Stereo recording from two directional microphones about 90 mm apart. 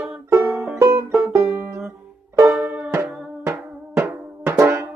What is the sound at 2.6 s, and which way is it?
Music, 15° right (ahead or behind).